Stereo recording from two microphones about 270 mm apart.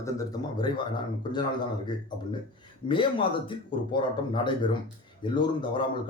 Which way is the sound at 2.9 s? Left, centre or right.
Centre.